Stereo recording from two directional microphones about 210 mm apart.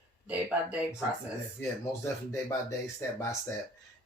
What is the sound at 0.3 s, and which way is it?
Speech, 5° right (ahead or behind).